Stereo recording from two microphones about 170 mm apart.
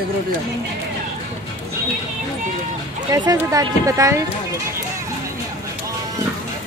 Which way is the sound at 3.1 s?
20° right (ahead or behind).